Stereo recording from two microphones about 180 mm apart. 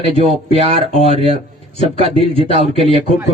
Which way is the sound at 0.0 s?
30° right (ahead or behind).